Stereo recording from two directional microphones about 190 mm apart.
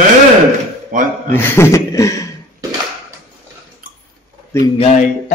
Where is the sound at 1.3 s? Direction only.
10° left (ahead or behind).